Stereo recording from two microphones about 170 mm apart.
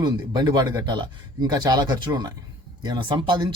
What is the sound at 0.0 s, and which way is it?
A man's voice, 25° right (ahead or behind).